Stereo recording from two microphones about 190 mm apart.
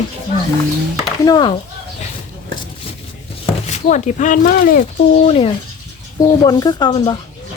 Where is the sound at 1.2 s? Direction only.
20° left (ahead or behind).